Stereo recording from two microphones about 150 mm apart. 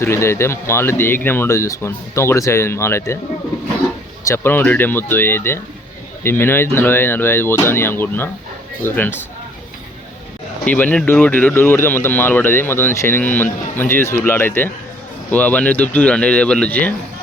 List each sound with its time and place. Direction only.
0.0 s speech: 15° left (ahead or behind)
4.2 s speech: 15° left (ahead or behind)
10.7 s speech: 10° left (ahead or behind)